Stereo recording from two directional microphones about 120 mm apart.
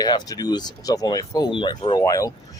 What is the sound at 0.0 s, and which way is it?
Speech, 35° left (ahead or behind).